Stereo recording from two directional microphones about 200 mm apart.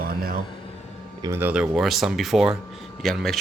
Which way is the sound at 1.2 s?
10° right (ahead or behind).